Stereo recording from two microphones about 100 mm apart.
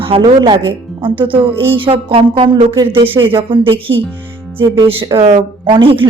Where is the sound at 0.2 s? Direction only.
50° right (ahead or behind).